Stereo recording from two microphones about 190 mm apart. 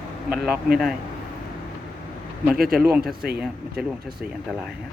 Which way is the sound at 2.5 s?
50° right (ahead or behind).